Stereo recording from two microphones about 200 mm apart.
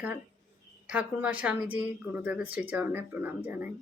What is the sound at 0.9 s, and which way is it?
A woman's voice, 5° right (ahead or behind).